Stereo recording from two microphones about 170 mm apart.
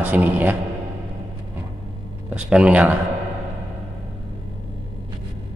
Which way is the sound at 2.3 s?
5° right (ahead or behind).